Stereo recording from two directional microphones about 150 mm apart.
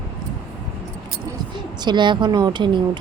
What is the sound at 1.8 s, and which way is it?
Speech, 30° right (ahead or behind).